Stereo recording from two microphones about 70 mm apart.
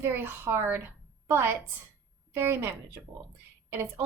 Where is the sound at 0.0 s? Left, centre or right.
Right.